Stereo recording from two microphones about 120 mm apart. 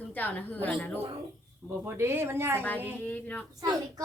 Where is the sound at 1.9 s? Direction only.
20° right (ahead or behind).